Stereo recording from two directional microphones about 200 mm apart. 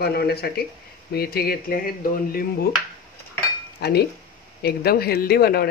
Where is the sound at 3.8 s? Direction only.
55° left (ahead or behind).